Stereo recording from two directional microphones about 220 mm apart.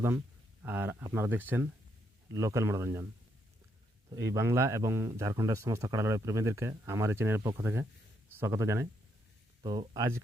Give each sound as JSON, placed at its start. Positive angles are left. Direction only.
{"t": 0.6, "sound": "speech", "side_deg": -10}
{"t": 4.1, "sound": "speech", "side_deg": -15}